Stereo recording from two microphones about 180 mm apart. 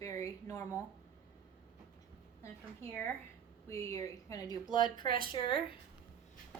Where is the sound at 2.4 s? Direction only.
15° left (ahead or behind).